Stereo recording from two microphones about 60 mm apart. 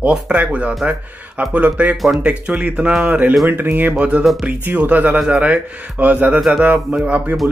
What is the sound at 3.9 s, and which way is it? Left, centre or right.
Speech, right.